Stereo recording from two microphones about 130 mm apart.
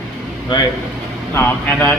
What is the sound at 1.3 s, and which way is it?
Speech, 15° left (ahead or behind).